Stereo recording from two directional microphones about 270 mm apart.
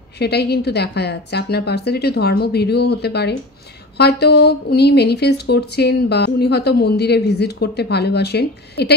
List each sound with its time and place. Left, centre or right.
0.2 s speech: left